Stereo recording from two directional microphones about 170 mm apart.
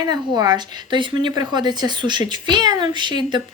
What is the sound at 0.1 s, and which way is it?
A woman's voice, 25° right (ahead or behind).